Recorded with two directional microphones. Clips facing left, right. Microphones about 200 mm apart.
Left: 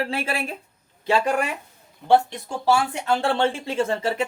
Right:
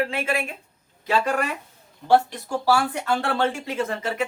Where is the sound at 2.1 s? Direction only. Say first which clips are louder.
Even; 20° left (ahead or behind).